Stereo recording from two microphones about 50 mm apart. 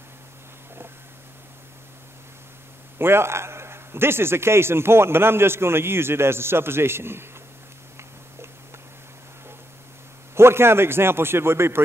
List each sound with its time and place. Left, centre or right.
3.0 s a man's voice: right
10.3 s a man's voice: right